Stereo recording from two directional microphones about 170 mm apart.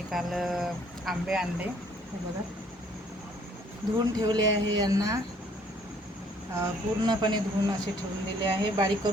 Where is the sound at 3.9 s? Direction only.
25° right (ahead or behind).